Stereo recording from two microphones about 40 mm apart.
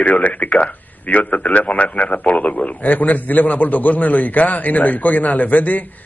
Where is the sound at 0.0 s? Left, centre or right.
Left.